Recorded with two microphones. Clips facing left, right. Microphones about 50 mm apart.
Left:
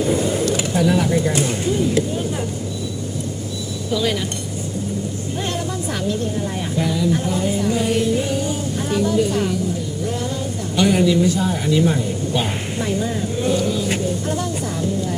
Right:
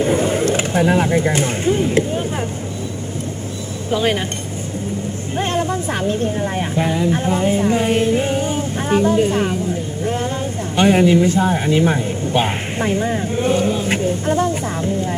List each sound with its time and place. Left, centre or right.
0.0 s speech: right
3.9 s speech: right
5.4 s speech: right
10.8 s speech: right